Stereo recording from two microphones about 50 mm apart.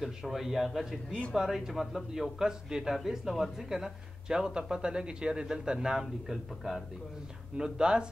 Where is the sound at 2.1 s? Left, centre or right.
Centre.